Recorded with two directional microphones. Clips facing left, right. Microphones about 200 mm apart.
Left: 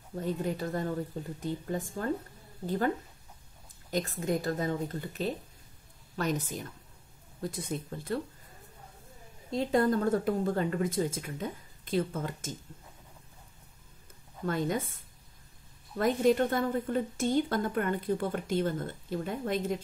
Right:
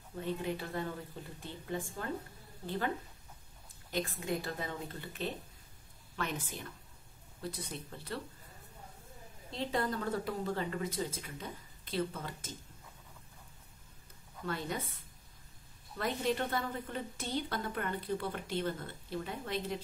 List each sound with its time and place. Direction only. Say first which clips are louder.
0.1 s a woman's voice: left 4 dB; 40° left (ahead or behind)
3.9 s a woman's voice: left 5 dB; 45° left (ahead or behind)
9.5 s a woman's voice: left 8 dB; 45° left (ahead or behind)
14.4 s a woman's voice: left 7 dB; 45° left (ahead or behind)
16.0 s a woman's voice: left 9 dB; 45° left (ahead or behind)